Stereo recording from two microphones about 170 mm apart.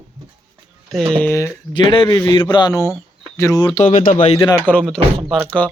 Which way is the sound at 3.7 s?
50° left (ahead or behind).